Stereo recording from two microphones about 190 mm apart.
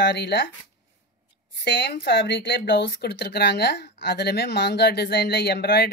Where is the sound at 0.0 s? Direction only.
65° left (ahead or behind).